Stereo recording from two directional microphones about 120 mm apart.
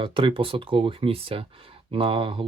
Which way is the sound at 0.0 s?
45° right (ahead or behind).